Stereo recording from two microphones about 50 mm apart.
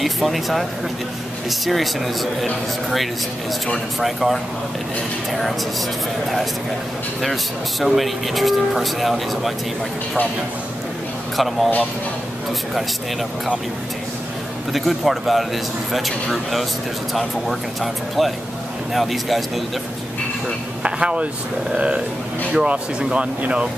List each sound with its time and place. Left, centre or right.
0.0 s a man's voice: centre
3.6 s a man's voice: centre
7.8 s a man's voice: centre
11.3 s a man's voice: centre
14.7 s a man's voice: centre
18.9 s a man's voice: centre
20.8 s speech: right